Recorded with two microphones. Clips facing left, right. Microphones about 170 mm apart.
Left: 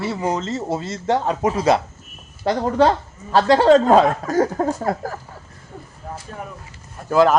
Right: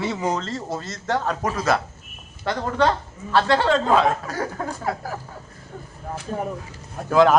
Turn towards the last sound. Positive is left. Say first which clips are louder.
# left 1 dB
turn(degrees=0)  # may be behind; listen again after turning